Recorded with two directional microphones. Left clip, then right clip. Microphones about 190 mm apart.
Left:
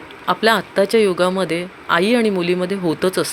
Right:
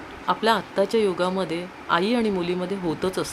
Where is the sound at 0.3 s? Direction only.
20° left (ahead or behind).